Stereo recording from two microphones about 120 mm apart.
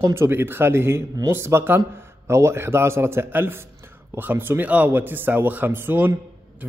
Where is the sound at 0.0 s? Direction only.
20° right (ahead or behind).